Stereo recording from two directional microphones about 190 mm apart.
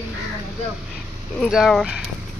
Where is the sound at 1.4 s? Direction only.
Centre (ahead or behind).